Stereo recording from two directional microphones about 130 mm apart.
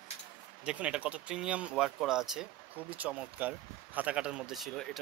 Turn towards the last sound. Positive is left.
turn(degrees=0)  # may be behind; listen again after turning